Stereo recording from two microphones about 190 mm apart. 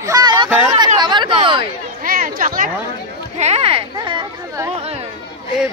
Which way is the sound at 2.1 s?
45° right (ahead or behind).